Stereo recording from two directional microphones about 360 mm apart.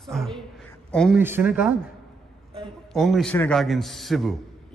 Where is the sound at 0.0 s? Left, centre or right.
Centre.